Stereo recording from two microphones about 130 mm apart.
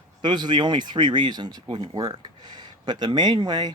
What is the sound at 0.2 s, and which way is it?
Speech, 35° right (ahead or behind).